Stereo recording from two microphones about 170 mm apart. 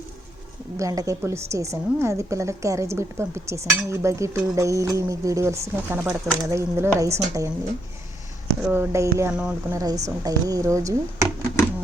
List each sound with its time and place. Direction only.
0.8 s a woman's voice: 20° right (ahead or behind)
8.7 s a woman's voice: 15° right (ahead or behind)
9.4 s a woman's voice: 5° right (ahead or behind)
9.7 s speech: 20° right (ahead or behind)